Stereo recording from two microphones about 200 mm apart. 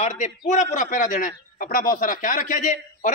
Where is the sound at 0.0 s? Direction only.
35° left (ahead or behind).